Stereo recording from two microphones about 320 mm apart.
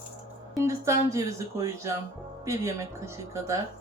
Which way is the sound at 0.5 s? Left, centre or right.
Centre.